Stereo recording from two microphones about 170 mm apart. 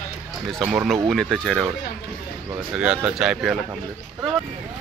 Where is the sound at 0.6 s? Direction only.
10° right (ahead or behind).